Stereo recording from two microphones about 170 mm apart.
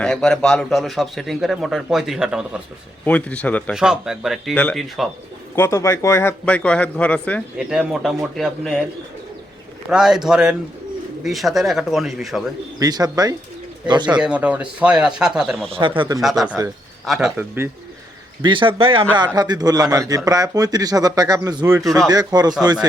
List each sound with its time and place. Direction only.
0.0 s a man's voice: 5° left (ahead or behind)
3.0 s speech: 10° left (ahead or behind)
3.8 s a man's voice: 5° right (ahead or behind)
5.5 s speech: 15° left (ahead or behind)
7.6 s a man's voice: 5° right (ahead or behind)
9.9 s a man's voice: 5° right (ahead or behind)
12.8 s a man's voice: 20° right (ahead or behind)
14.2 s a man's voice: 5° right (ahead or behind)
15.7 s a man's voice: 30° right (ahead or behind)
16.2 s a man's voice: centre (ahead or behind)
18.4 s a man's voice: 30° right (ahead or behind)